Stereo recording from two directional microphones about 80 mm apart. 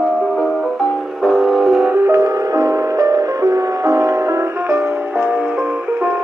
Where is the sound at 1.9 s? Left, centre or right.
Right.